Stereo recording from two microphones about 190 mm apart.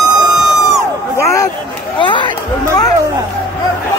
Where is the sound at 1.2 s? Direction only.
15° left (ahead or behind).